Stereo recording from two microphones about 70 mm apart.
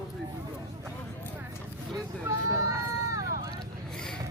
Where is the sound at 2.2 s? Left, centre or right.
Right.